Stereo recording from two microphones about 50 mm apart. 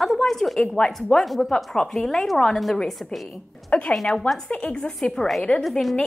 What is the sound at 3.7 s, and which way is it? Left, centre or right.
A woman's voice, left.